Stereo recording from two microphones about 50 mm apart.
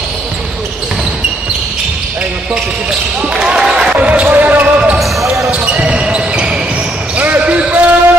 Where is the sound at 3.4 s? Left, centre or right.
Centre.